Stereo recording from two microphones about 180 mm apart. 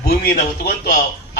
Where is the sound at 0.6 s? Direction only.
50° left (ahead or behind).